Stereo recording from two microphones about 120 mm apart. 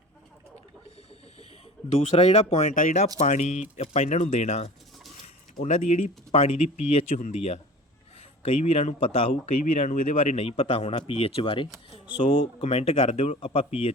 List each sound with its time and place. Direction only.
1.9 s speech: 60° left (ahead or behind)
12.6 s speech: 55° left (ahead or behind)